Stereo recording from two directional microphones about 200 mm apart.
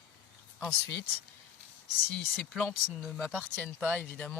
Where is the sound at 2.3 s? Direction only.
Centre (ahead or behind).